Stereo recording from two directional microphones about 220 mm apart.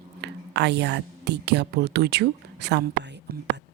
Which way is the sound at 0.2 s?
50° right (ahead or behind).